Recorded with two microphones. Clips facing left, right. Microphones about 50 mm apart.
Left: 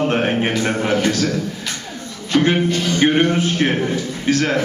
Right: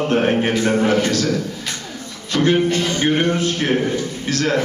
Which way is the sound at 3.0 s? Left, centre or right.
Left.